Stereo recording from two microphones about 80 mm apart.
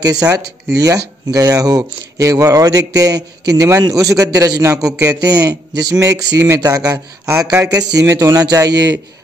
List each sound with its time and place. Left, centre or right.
0.0 s speech: right